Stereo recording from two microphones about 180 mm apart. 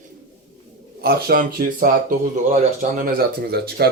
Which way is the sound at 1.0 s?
55° right (ahead or behind).